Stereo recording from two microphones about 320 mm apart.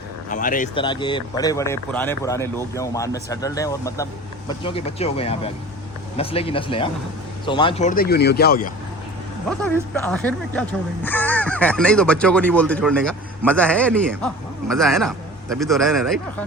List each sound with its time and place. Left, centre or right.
0.3 s speech: left
9.9 s speech: centre